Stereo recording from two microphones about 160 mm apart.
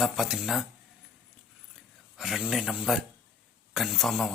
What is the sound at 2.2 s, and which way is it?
Speech, 5° right (ahead or behind).